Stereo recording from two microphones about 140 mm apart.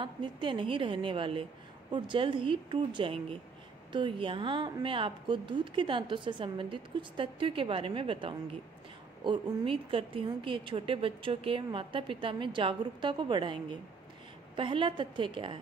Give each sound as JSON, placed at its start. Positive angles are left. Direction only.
{"t": 0.0, "sound": "a woman's voice", "side_deg": -35}